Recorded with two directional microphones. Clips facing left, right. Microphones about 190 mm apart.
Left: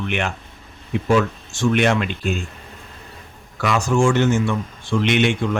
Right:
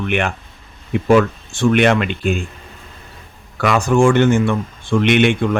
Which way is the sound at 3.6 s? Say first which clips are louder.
Right 4 dB; 55° right (ahead or behind).